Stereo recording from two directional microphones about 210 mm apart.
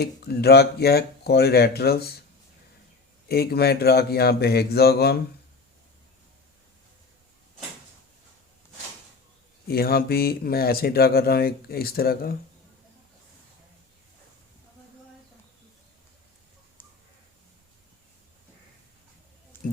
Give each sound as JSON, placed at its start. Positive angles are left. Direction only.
{"t": 0.0, "sound": "speech", "side_deg": 50}
{"t": 3.2, "sound": "speech", "side_deg": 50}
{"t": 9.6, "sound": "speech", "side_deg": 45}
{"t": 19.5, "sound": "a sound", "side_deg": 10}